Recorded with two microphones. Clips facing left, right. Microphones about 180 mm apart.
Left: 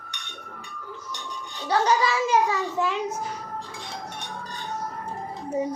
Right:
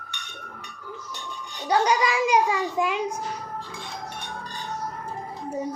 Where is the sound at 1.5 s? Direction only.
10° right (ahead or behind).